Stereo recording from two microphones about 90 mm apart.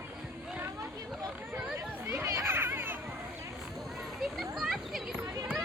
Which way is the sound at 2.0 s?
30° right (ahead or behind).